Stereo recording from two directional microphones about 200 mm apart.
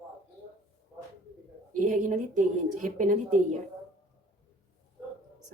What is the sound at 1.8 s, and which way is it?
A woman's voice, 40° right (ahead or behind).